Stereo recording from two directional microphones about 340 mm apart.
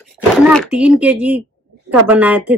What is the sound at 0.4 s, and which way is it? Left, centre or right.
Speech, centre.